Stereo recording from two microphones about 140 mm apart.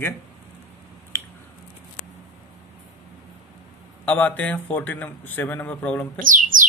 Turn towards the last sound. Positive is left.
turn(degrees=-75)  # may be behind; listen again after turning